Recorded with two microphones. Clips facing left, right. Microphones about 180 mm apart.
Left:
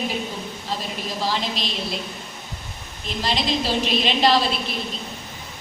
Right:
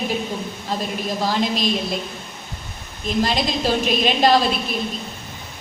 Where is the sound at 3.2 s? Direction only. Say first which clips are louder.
Right 3 dB; 50° right (ahead or behind).